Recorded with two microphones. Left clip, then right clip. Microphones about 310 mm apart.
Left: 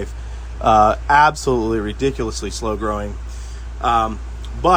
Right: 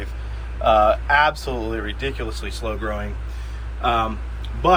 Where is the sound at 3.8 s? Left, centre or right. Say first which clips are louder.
Left 4 dB; centre.